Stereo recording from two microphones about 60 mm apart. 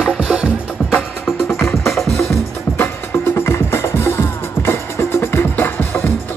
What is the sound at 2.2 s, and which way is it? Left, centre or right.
Music, left.